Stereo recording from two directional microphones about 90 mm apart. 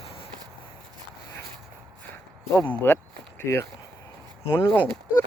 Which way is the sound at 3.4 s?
25° left (ahead or behind).